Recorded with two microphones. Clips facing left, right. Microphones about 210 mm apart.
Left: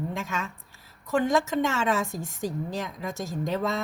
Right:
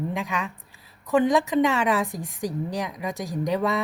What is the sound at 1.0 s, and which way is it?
A woman's voice, 15° right (ahead or behind).